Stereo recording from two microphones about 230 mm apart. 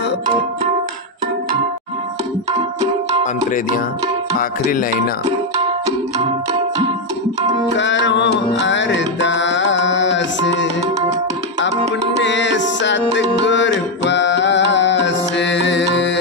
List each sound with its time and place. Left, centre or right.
4.4 s music: left
7.7 s music: left
12.2 s music: left